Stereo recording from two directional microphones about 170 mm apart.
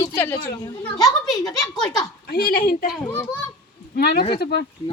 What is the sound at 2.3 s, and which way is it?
Speech, 60° left (ahead or behind).